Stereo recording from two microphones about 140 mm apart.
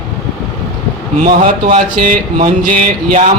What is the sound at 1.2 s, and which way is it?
Speech, 75° right (ahead or behind).